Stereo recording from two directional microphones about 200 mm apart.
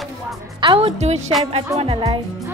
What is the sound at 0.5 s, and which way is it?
A woman's voice, 25° right (ahead or behind).